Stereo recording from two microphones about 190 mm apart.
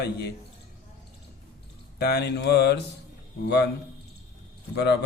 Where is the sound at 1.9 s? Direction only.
60° left (ahead or behind).